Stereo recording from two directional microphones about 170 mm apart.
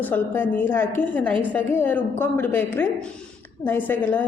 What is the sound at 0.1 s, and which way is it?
A woman's voice, 10° left (ahead or behind).